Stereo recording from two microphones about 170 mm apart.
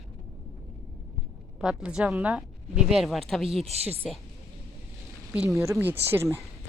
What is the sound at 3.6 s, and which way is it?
Speech, 35° right (ahead or behind).